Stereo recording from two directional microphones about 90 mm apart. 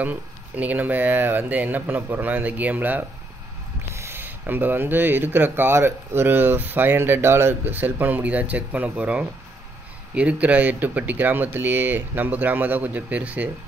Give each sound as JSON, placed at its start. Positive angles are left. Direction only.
{"t": 0.0, "sound": "speech", "side_deg": -15}